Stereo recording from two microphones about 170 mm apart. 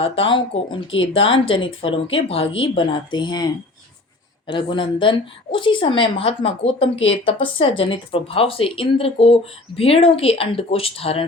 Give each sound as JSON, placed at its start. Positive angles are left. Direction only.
{"t": 0.0, "sound": "a woman's voice", "side_deg": 30}